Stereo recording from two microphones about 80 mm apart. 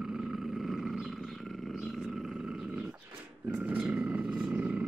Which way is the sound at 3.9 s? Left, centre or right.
Centre.